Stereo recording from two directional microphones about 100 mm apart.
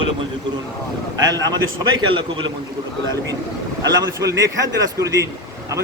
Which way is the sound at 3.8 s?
40° right (ahead or behind).